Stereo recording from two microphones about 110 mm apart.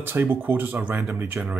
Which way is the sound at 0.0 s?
20° right (ahead or behind).